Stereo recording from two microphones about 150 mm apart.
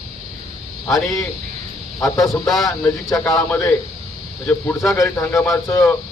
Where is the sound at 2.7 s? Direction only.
20° left (ahead or behind).